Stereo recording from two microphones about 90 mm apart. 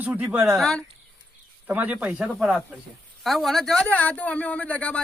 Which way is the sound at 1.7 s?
15° right (ahead or behind).